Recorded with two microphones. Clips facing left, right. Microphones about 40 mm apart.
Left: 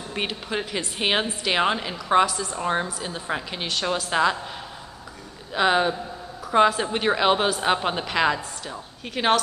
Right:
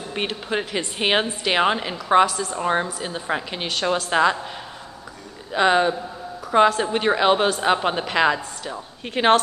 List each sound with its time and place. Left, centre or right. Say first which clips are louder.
0.2 s a woman's voice: right 3 dB; centre
5.5 s a woman's voice: right 3 dB; centre
9.1 s a woman's voice: right 4 dB; right